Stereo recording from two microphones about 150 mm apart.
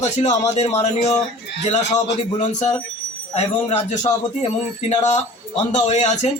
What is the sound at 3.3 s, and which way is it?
Speech, 45° left (ahead or behind).